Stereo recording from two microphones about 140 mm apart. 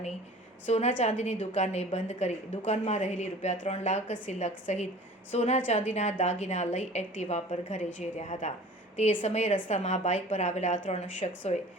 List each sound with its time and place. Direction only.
0.6 s a woman's voice: 55° left (ahead or behind)